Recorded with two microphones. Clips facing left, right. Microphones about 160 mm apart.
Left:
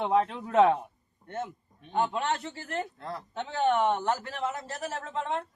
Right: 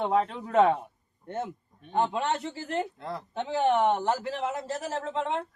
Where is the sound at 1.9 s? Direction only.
25° right (ahead or behind).